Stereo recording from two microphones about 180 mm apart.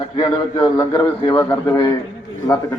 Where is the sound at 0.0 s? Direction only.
30° left (ahead or behind).